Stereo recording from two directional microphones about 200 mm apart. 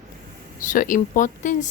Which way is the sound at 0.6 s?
40° left (ahead or behind).